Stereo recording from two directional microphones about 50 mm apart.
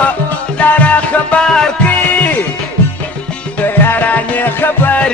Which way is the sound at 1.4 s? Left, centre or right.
Centre.